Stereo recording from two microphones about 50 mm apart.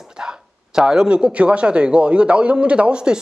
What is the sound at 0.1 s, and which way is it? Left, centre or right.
A man's voice, centre.